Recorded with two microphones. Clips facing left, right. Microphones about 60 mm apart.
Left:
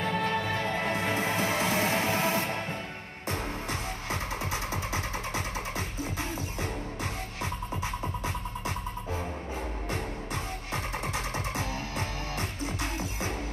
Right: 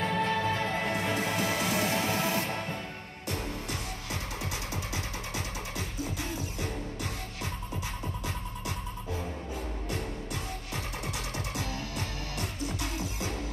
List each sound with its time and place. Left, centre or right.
0.0 s music: centre
0.8 s music: left
4.9 s music: left
9.8 s music: left
12.4 s music: left